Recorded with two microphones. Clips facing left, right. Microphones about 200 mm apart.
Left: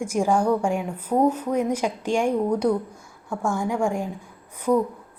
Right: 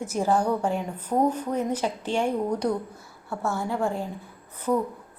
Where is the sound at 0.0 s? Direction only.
10° left (ahead or behind).